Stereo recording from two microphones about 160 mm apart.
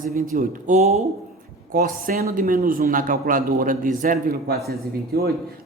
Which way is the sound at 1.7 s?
65° right (ahead or behind).